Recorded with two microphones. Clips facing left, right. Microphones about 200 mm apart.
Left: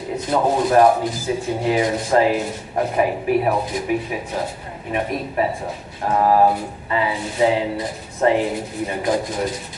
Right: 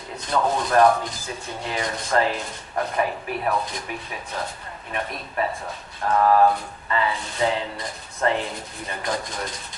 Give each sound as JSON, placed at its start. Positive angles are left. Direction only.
{"t": 0.5, "sound": "speech", "side_deg": 10}
{"t": 5.6, "sound": "speech", "side_deg": 25}